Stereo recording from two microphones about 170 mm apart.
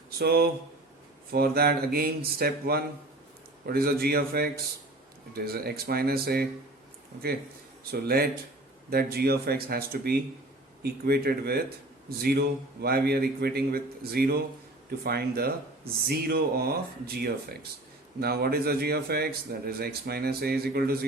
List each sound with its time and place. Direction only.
0.2 s a man's voice: 65° right (ahead or behind)
7.9 s a man's voice: 65° right (ahead or behind)